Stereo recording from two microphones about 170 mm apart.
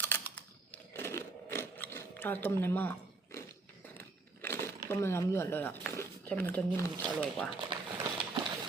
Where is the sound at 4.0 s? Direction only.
15° left (ahead or behind).